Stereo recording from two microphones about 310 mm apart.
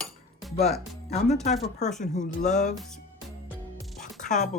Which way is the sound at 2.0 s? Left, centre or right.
Left.